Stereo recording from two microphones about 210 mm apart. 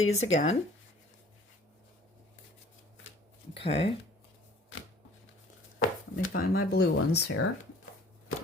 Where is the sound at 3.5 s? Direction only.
25° left (ahead or behind).